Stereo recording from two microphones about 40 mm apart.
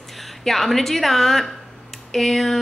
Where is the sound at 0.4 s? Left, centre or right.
Centre.